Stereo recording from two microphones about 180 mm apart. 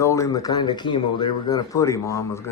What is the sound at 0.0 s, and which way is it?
Speech, 15° left (ahead or behind).